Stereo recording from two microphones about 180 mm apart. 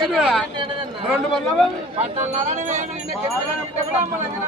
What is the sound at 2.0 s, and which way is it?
Speech, 40° right (ahead or behind).